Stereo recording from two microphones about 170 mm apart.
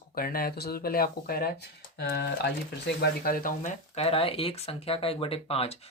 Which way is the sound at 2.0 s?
80° left.